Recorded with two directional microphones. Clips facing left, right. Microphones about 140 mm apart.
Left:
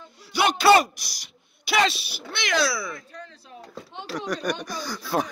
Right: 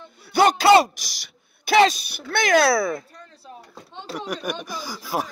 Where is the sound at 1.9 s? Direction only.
45° right (ahead or behind).